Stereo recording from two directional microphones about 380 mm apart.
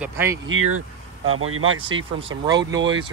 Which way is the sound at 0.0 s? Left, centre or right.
Centre.